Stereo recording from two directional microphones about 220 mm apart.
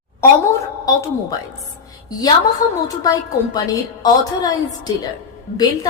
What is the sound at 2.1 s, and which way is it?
A woman's voice, 15° left (ahead or behind).